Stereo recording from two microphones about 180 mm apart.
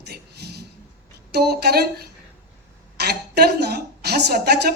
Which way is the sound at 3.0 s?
60° right (ahead or behind).